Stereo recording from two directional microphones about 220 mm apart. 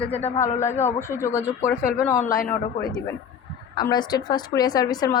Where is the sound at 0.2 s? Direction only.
10° left (ahead or behind).